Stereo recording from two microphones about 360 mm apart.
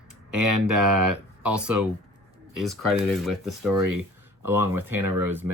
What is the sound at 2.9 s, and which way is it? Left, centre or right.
Speech, centre.